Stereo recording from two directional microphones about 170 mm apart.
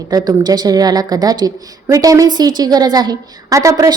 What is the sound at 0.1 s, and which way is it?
A woman's voice, 20° right (ahead or behind).